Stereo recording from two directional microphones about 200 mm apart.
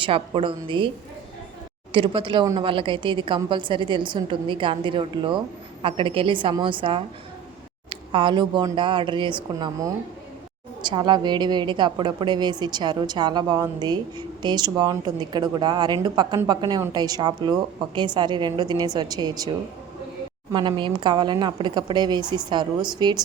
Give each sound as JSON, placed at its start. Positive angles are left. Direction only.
{"t": 0.0, "sound": "a woman's voice", "side_deg": -25}
{"t": 1.9, "sound": "a woman's voice", "side_deg": -25}
{"t": 20.5, "sound": "a woman's voice", "side_deg": -20}